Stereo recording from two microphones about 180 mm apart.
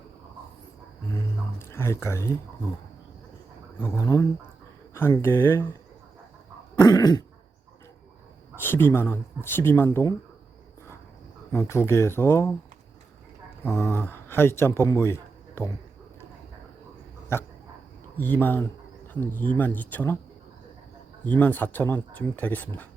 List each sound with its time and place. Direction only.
1.0 s a sound: 15° left (ahead or behind)
3.8 s speech: 15° left (ahead or behind)
6.8 s throat clearing: 20° left (ahead or behind)
8.5 s speech: 10° left (ahead or behind)
11.5 s speech: 15° left (ahead or behind)
13.7 s a man's voice: 15° left (ahead or behind)
17.3 s speech: 15° left (ahead or behind)
21.2 s speech: 10° left (ahead or behind)